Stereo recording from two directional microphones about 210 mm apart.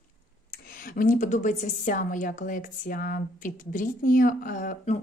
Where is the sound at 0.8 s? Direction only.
40° left (ahead or behind).